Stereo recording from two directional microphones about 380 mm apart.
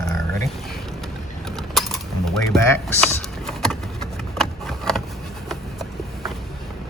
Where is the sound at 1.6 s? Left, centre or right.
Centre.